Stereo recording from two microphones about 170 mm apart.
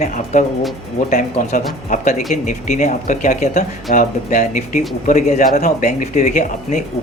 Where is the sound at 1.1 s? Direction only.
45° left (ahead or behind).